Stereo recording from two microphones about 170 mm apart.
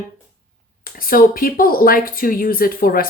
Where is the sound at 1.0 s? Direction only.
55° left (ahead or behind).